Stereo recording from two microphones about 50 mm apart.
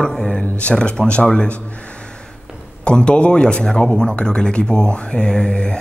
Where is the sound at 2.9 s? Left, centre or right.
Centre.